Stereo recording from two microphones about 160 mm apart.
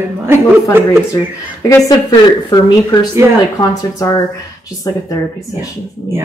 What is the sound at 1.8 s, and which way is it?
Speech, 25° left (ahead or behind).